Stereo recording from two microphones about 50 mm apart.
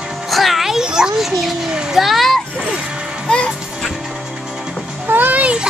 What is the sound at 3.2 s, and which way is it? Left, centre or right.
Music, left.